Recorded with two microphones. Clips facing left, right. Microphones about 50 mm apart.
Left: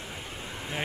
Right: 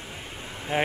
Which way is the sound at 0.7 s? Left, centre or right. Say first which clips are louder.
Right 8 dB; right.